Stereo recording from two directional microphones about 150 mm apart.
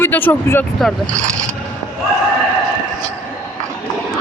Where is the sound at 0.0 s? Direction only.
15° left (ahead or behind).